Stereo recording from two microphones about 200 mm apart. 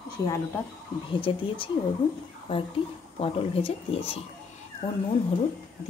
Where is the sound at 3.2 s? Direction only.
30° left (ahead or behind).